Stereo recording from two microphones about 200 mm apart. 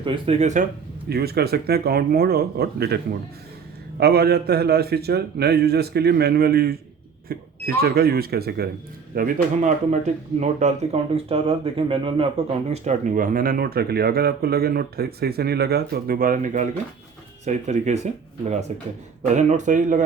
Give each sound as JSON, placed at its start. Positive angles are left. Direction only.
{"t": 0.0, "sound": "speech", "side_deg": -30}
{"t": 1.1, "sound": "speech", "side_deg": -50}
{"t": 4.0, "sound": "speech", "side_deg": -50}
{"t": 9.1, "sound": "speech", "side_deg": -40}